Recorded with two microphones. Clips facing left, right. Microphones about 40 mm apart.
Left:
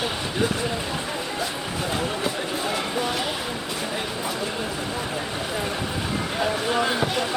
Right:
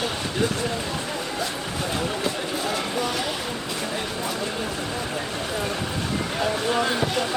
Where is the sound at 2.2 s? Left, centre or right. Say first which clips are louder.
Even; centre.